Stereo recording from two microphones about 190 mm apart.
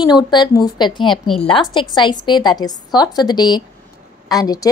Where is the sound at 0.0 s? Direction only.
20° left (ahead or behind).